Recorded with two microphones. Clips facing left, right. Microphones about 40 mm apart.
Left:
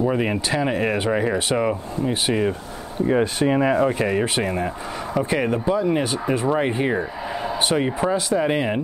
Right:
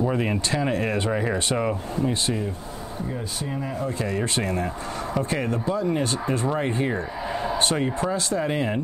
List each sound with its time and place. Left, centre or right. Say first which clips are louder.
0.0 s speech: left 3 dB; centre
3.1 s speech: left 15 dB; left
4.0 s speech: left 5 dB; left